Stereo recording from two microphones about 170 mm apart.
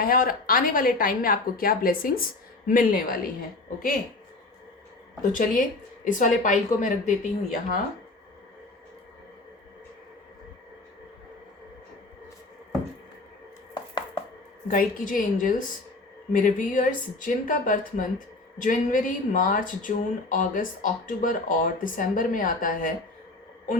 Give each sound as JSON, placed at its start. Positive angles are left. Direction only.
{"t": 0.0, "sound": "a woman's voice", "side_deg": 55}
{"t": 5.3, "sound": "speech", "side_deg": 55}
{"t": 14.7, "sound": "speech", "side_deg": 55}